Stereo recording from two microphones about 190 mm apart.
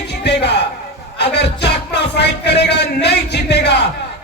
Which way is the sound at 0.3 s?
60° left (ahead or behind).